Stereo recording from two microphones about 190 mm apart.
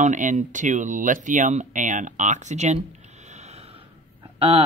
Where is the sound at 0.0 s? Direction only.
40° right (ahead or behind).